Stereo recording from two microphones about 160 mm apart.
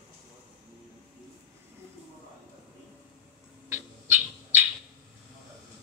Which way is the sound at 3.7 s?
15° right (ahead or behind).